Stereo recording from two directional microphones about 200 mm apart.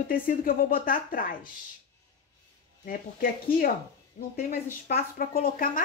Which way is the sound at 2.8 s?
45° left (ahead or behind).